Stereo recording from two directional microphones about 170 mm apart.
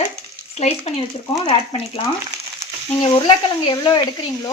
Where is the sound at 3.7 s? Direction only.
25° left (ahead or behind).